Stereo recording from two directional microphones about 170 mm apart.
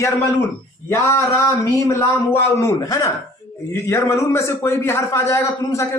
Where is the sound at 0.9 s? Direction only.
15° left (ahead or behind).